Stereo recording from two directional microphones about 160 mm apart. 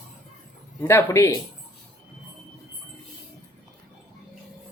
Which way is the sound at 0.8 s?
15° left (ahead or behind).